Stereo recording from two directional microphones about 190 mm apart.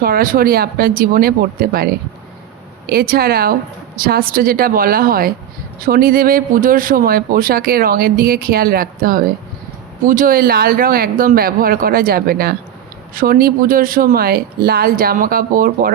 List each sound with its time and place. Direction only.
0.0 s speech: 50° right (ahead or behind)